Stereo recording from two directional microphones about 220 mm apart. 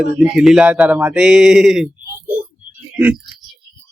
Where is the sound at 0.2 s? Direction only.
5° right (ahead or behind).